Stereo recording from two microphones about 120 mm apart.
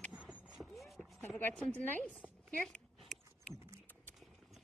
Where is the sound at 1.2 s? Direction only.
15° left (ahead or behind).